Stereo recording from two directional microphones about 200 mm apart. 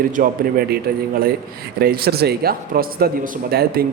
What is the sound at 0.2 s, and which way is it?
A man's voice, 40° right (ahead or behind).